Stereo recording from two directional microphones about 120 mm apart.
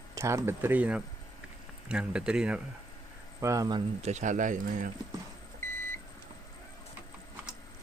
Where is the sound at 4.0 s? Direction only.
75° right (ahead or behind).